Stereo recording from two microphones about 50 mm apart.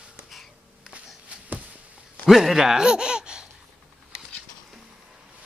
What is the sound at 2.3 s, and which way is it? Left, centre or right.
Laughter, centre.